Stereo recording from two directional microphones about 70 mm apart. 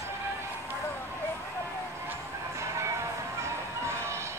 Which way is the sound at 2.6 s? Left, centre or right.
Right.